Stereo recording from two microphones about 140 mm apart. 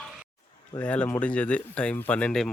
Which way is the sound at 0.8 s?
10° left (ahead or behind).